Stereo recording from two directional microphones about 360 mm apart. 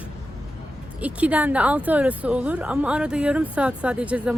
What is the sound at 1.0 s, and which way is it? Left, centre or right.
Speech, centre.